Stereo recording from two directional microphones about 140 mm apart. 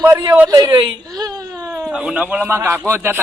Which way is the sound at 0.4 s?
30° right (ahead or behind).